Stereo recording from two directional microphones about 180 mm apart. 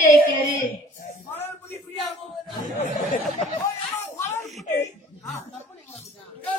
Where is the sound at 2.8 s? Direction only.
40° left (ahead or behind).